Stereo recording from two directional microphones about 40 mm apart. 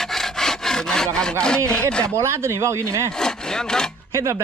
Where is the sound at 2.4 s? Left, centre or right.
Right.